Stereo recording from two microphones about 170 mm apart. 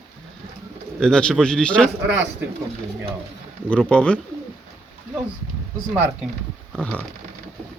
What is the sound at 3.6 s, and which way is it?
Speech, 5° left (ahead or behind).